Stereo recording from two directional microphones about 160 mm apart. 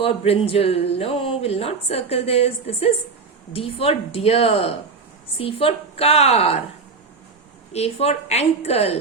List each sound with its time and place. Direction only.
0.0 s speech: 35° left (ahead or behind)
7.7 s speech: 40° left (ahead or behind)